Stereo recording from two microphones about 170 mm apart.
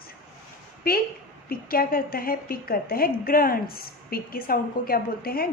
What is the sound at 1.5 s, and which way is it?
A woman's voice, 60° left (ahead or behind).